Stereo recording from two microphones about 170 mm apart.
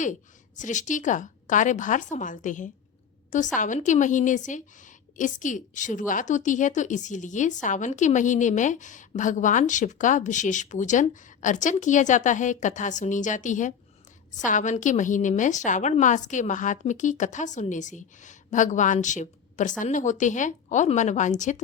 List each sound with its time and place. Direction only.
0.5 s a woman's voice: 45° left (ahead or behind)